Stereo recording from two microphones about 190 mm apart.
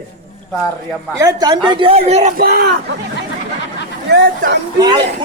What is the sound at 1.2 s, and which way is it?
Speech, 25° right (ahead or behind).